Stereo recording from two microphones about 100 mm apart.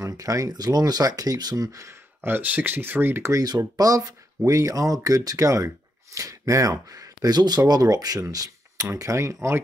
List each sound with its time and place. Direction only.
0.0 s speech: 35° right (ahead or behind)